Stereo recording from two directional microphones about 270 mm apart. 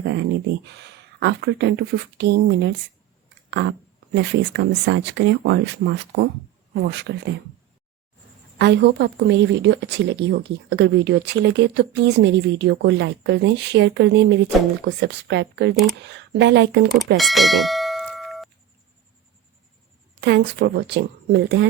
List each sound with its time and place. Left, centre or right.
0.0 s a woman's voice: right
8.5 s a woman's voice: right
17.2 s bell: centre
20.2 s a woman's voice: right